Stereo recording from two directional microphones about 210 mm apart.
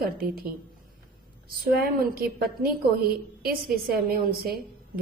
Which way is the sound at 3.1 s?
45° right (ahead or behind).